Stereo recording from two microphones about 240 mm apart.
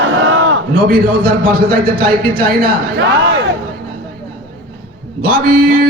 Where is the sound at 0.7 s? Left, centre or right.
Right.